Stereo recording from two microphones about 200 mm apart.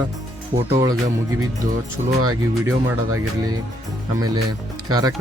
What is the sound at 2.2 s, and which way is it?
Speech, 20° right (ahead or behind).